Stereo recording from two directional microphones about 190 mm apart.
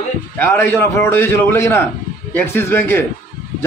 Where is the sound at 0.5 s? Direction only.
10° left (ahead or behind).